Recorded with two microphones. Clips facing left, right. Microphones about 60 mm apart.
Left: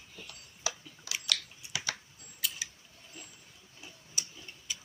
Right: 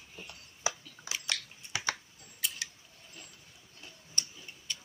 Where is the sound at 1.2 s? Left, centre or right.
Right.